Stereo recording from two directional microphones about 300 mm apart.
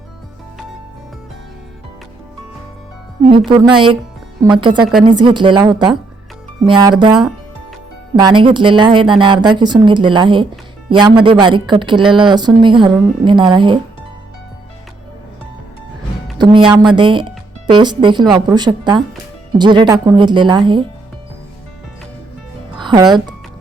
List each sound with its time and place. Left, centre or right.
3.5 s speech: centre
8.1 s speech: centre
16.4 s speech: centre
22.7 s music: centre